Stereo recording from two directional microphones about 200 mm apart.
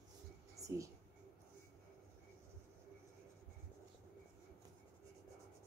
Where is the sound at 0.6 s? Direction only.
15° right (ahead or behind).